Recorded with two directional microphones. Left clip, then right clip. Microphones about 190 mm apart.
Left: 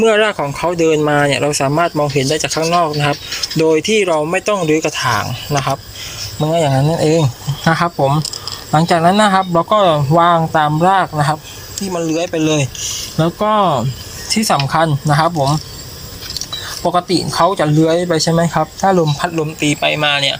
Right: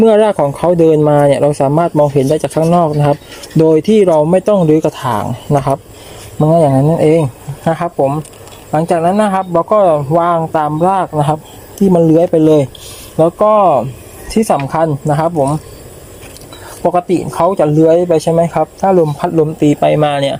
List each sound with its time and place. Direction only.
0.0 s speech: 20° right (ahead or behind)
1.7 s speech: 15° right (ahead or behind)
7.2 s speech: 5° right (ahead or behind)
11.9 s speech: 30° right (ahead or behind)
13.2 s speech: centre (ahead or behind)
14.4 s speech: 15° right (ahead or behind)
16.8 s speech: 15° right (ahead or behind)
19.2 s speech: 30° right (ahead or behind)